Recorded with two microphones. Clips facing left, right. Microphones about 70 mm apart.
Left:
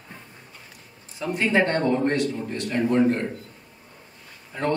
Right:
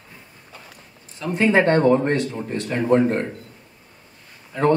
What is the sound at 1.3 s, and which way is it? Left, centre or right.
Speech, right.